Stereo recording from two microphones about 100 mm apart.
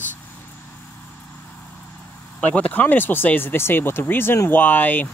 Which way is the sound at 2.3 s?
15° left (ahead or behind).